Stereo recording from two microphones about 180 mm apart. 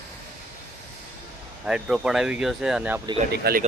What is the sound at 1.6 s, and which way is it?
Speech, 5° right (ahead or behind).